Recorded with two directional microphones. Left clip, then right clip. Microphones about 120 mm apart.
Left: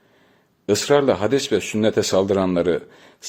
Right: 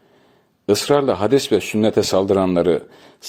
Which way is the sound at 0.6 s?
40° right (ahead or behind).